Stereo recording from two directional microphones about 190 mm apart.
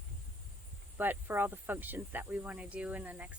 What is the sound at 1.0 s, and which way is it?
Speech, 10° right (ahead or behind).